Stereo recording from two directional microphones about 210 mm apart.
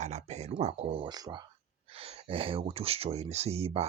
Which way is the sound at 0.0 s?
30° right (ahead or behind).